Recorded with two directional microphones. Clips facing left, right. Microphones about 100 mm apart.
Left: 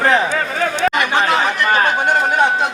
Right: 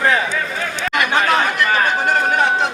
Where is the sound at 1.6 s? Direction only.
25° left (ahead or behind).